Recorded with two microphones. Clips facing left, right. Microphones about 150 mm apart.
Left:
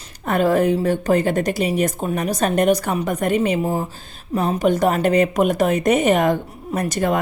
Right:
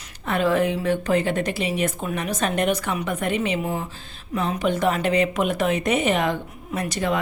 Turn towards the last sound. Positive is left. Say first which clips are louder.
# left 4 dB
turn(degrees=45)  # may be behind; listen again after turning